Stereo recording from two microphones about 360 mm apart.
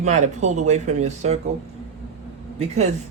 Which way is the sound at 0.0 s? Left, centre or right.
Centre.